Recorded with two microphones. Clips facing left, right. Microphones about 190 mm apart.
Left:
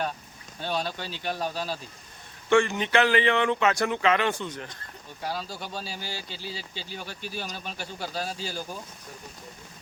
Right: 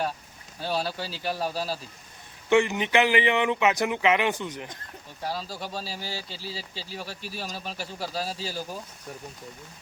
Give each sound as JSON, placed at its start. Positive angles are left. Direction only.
{"t": 0.6, "sound": "speech", "side_deg": -5}
{"t": 2.5, "sound": "speech", "side_deg": -15}
{"t": 5.2, "sound": "speech", "side_deg": 0}